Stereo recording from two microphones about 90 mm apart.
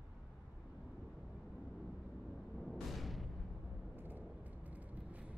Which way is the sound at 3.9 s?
20° right (ahead or behind).